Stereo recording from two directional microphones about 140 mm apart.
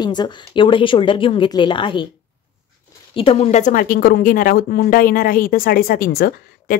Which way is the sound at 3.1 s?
40° left (ahead or behind).